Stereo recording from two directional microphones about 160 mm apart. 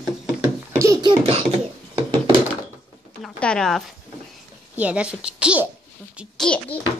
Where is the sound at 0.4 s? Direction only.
20° right (ahead or behind); by 2.0 s 40° right (ahead or behind).